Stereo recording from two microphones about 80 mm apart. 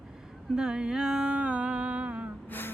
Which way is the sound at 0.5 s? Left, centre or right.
Centre.